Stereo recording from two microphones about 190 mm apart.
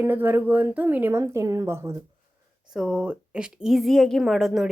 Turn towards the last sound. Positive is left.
turn(degrees=0)  # may be behind; listen again after turning